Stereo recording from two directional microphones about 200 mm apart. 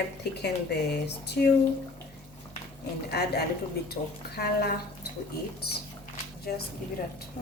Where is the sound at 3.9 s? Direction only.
50° left (ahead or behind).